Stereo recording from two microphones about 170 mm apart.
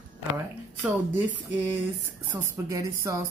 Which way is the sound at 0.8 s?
10° right (ahead or behind).